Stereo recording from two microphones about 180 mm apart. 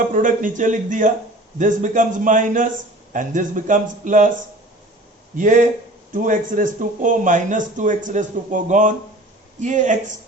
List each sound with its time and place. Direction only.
0.1 s speech: 45° right (ahead or behind)
5.4 s speech: 45° right (ahead or behind)